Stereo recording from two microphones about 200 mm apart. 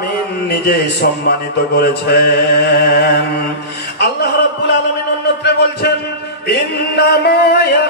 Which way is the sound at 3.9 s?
55° left (ahead or behind).